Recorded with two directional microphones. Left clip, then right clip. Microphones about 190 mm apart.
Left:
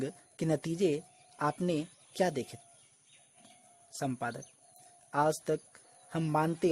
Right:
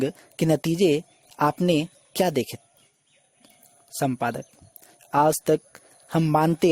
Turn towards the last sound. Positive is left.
turn(degrees=-45)  # may be behind; listen again after turning